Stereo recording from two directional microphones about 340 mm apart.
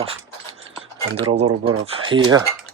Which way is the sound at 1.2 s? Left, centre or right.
Centre.